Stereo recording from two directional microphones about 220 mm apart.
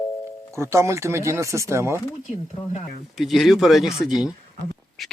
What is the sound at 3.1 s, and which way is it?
Speech, centre (ahead or behind).